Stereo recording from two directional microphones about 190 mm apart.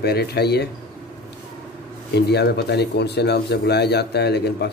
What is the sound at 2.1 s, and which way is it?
Speech, 60° left (ahead or behind).